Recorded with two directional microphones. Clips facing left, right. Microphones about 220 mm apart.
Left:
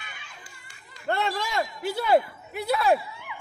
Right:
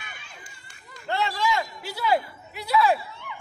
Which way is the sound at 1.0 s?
50° left (ahead or behind).